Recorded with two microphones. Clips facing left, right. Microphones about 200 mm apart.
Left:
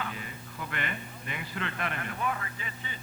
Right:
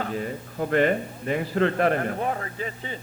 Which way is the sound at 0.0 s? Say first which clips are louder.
Right 10 dB; 40° right (ahead or behind).